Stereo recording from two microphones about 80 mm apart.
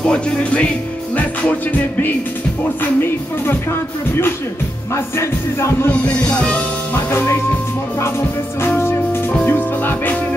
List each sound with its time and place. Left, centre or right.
0.0 s speech: centre
1.7 s music: left
4.9 s music: left
5.9 s speech: centre
7.1 s music: left
9.5 s speech: left